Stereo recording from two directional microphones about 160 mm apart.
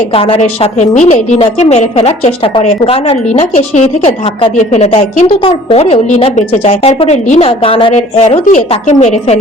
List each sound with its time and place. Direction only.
0.1 s a woman's voice: 35° left (ahead or behind)